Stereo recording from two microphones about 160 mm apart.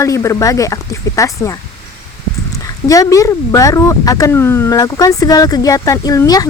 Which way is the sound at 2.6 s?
20° left (ahead or behind).